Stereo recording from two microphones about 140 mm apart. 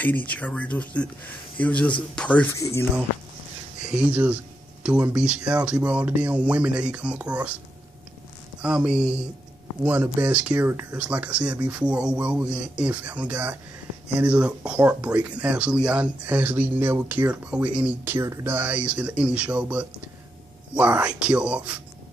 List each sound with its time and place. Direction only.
0.0 s speech: 10° left (ahead or behind)
2.6 s speech: 20° left (ahead or behind)
3.8 s speech: 10° right (ahead or behind)
8.6 s speech: 10° right (ahead or behind)
10.2 s speech: 10° right (ahead or behind)